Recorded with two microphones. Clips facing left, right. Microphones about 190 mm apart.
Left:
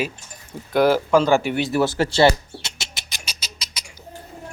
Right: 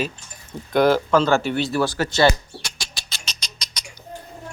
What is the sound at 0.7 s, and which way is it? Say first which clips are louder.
Speech: even; 5° left (ahead or behind).